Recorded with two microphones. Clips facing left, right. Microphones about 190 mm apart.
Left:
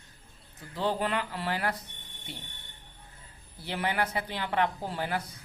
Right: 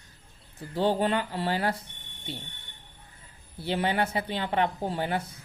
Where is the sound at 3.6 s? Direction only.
25° right (ahead or behind).